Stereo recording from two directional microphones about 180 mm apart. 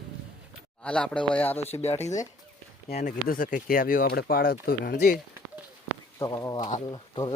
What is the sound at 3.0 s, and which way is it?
Speech, 45° left (ahead or behind).